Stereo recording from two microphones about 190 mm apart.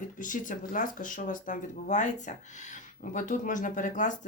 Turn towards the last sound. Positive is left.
turn(degrees=40)  # may be behind; listen again after turning